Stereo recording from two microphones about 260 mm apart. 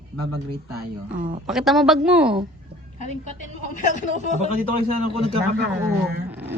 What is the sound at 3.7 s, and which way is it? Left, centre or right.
Speech, left.